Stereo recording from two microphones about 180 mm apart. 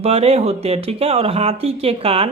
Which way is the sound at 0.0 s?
35° right (ahead or behind).